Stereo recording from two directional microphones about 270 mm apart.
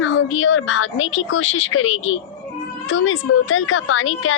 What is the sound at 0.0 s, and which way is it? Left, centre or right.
A woman's voice, left.